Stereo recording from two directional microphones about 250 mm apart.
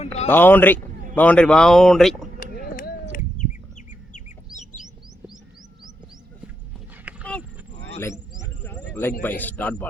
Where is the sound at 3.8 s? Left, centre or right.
Left.